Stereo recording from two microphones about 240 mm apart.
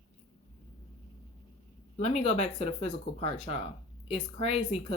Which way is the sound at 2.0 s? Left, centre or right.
Left.